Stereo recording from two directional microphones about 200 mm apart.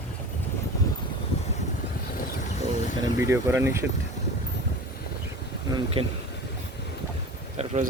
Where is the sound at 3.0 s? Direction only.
15° right (ahead or behind).